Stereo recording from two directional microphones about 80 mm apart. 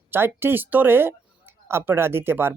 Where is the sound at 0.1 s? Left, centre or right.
Right.